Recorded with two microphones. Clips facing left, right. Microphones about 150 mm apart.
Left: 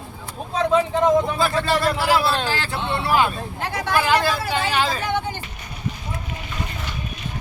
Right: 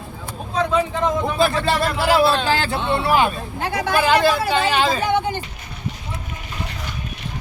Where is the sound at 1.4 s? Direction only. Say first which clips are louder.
Right 2 dB; 25° right (ahead or behind).